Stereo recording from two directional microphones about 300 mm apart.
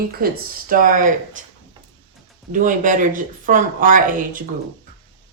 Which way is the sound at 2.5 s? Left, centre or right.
Right.